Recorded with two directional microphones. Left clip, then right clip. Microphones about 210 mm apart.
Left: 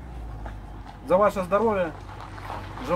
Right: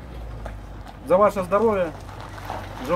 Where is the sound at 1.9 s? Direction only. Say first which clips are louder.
Right 2 dB; 55° right (ahead or behind).